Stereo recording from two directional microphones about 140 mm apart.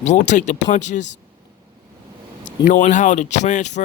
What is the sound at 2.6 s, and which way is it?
Speech, 65° left (ahead or behind).